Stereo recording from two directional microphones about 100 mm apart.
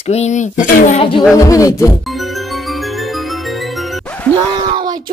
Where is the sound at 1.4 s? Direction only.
35° left (ahead or behind).